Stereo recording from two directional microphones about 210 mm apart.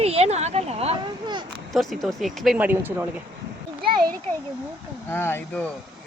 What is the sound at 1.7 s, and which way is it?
Speech, centre (ahead or behind).